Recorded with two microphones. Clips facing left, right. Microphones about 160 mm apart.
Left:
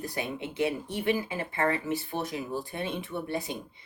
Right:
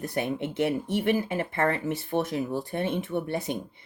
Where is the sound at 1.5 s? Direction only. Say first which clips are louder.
Even; 55° right (ahead or behind).